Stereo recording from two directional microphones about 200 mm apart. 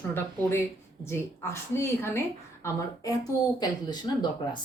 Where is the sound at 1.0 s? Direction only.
10° left (ahead or behind).